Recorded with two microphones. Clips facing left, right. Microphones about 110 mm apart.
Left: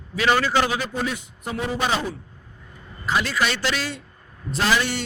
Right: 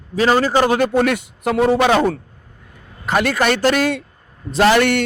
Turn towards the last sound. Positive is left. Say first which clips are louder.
# right 9 dB
turn(degrees=-65)  # may be behind; listen again after turning